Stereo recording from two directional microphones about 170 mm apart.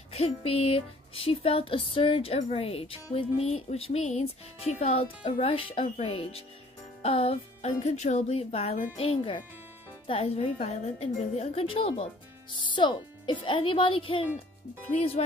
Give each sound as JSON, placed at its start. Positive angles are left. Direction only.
{"t": 0.1, "sound": "speech", "side_deg": 35}